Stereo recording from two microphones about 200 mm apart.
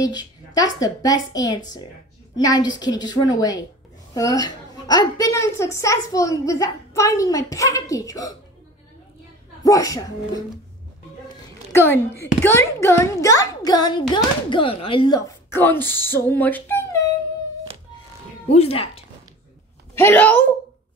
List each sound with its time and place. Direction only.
0.0 s a woman's voice: 20° left (ahead or behind)
9.7 s a woman's voice: 15° left (ahead or behind)
11.7 s a woman's voice: 15° left (ahead or behind)
18.5 s a woman's voice: 30° left (ahead or behind)
20.0 s a woman's voice: 10° left (ahead or behind)